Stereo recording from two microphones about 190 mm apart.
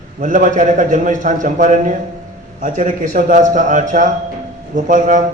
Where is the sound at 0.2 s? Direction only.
45° right (ahead or behind).